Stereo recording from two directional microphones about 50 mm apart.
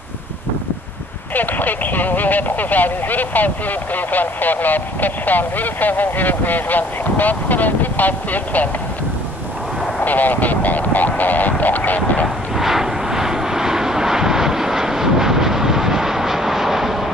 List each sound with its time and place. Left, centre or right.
1.3 s speech: left
9.9 s speech: left
12.5 s vehicle: centre